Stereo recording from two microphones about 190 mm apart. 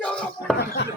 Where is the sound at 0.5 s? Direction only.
60° left (ahead or behind).